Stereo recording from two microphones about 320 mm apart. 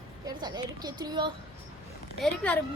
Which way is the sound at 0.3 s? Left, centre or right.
Centre.